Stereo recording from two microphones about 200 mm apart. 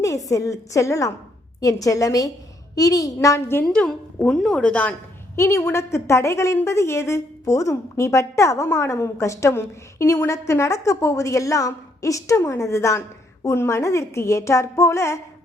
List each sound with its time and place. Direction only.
0.0 s a woman's voice: 15° left (ahead or behind)